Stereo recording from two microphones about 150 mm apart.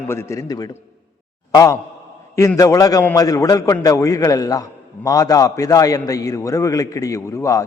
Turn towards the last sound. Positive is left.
turn(degrees=20)  # may be behind; listen again after turning